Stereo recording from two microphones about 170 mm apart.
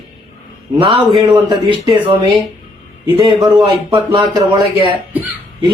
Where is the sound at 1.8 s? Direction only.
30° right (ahead or behind).